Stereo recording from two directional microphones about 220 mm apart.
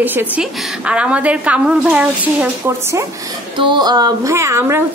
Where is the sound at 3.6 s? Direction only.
20° right (ahead or behind).